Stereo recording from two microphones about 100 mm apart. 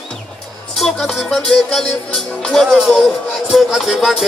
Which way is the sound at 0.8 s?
Centre (ahead or behind).